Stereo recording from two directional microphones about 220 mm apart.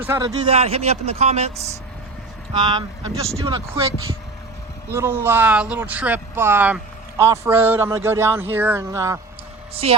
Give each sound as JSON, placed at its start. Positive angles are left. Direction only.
{"t": 0.0, "sound": "speech", "side_deg": -15}
{"t": 4.9, "sound": "speech", "side_deg": -10}
{"t": 9.8, "sound": "speech", "side_deg": -30}